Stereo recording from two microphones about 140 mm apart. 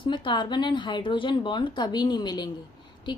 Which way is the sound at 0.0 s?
35° left (ahead or behind).